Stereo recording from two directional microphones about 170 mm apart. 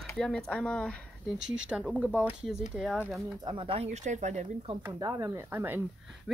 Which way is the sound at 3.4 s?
30° right (ahead or behind).